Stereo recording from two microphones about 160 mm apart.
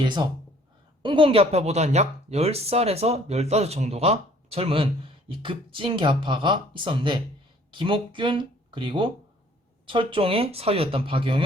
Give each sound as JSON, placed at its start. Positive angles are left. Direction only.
{"t": 0.0, "sound": "speech", "side_deg": -30}